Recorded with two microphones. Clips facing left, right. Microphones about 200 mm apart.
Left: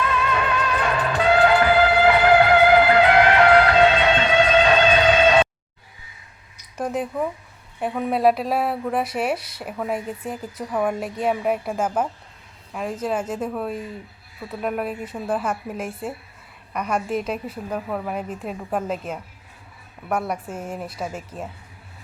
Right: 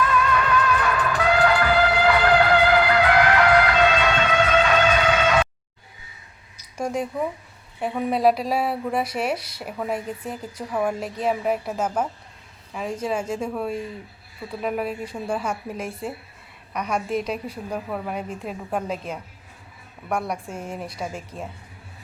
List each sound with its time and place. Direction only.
0.0 s music: 25° left (ahead or behind)
6.7 s a woman's voice: 5° left (ahead or behind)